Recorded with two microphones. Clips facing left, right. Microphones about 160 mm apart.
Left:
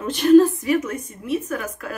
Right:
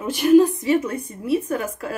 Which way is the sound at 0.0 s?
10° right (ahead or behind).